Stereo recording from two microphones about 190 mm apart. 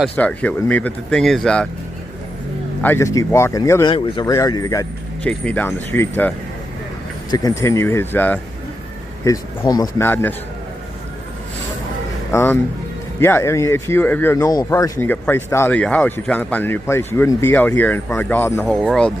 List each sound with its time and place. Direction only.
0.1 s speech: 5° left (ahead or behind)
2.8 s speech: 15° left (ahead or behind)
5.2 s speech: 5° left (ahead or behind)
12.3 s speech: 15° left (ahead or behind)